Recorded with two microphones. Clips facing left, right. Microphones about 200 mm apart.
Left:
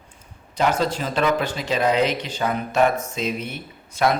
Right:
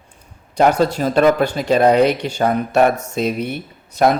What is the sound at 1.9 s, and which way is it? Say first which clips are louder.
Speech: right 7 dB; 55° right (ahead or behind).